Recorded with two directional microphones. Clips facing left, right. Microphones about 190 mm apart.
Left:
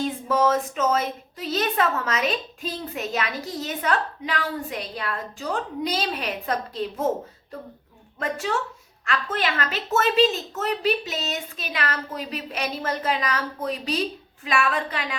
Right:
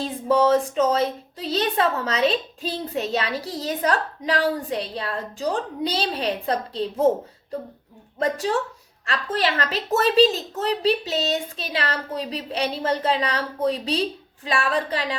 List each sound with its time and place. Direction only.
0.0 s a woman's voice: 30° right (ahead or behind)
8.2 s a woman's voice: 35° right (ahead or behind)